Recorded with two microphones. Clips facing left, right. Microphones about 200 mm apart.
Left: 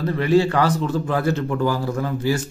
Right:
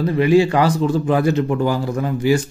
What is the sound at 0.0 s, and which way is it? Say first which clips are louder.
Speech: right 3 dB; 15° right (ahead or behind).